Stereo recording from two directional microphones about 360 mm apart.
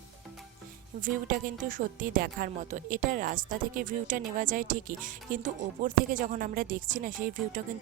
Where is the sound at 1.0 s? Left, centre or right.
Right.